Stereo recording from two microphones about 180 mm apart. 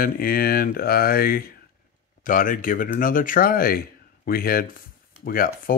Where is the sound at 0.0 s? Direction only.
55° left (ahead or behind).